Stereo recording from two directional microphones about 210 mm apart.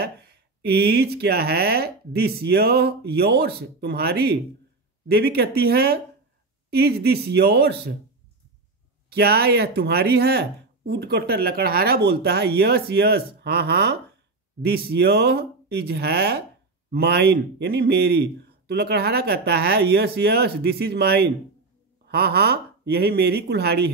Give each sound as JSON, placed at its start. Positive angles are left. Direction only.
{"t": 0.0, "sound": "speech", "side_deg": -50}
{"t": 9.1, "sound": "speech", "side_deg": -50}